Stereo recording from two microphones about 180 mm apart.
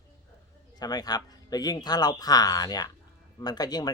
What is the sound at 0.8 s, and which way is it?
A man's voice, 20° left (ahead or behind).